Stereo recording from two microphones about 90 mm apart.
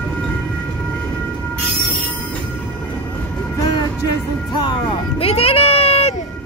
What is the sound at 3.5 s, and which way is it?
Music, 45° left (ahead or behind).